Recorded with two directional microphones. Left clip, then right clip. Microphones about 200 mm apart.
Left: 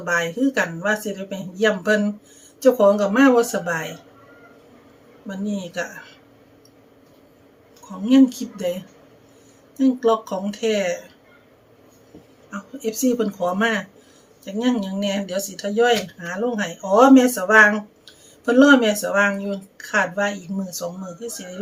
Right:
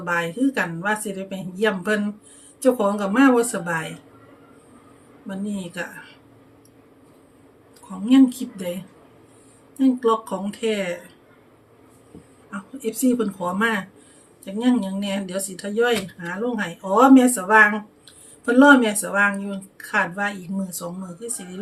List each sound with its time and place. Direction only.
0.0 s speech: 5° right (ahead or behind)
5.3 s speech: 5° right (ahead or behind)
8.0 s speech: 5° right (ahead or behind)
9.7 s speech: 5° right (ahead or behind)
12.5 s speech: 5° right (ahead or behind)